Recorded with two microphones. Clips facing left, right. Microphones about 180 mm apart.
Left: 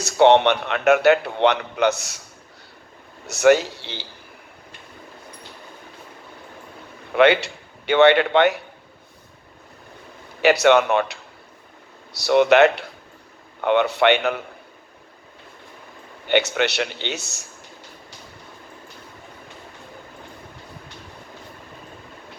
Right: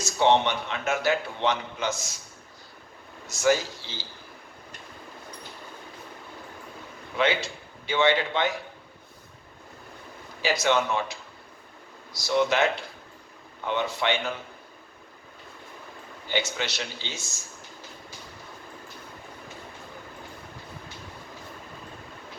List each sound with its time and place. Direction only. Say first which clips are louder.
0.0 s a man's voice: left 7 dB; 65° left (ahead or behind)
3.2 s a man's voice: left 8 dB; 70° left (ahead or behind)
7.1 s a man's voice: left 9 dB; 65° left (ahead or behind)
10.4 s a man's voice: left 9 dB; 65° left (ahead or behind)
16.2 s a man's voice: left 9 dB; 65° left (ahead or behind)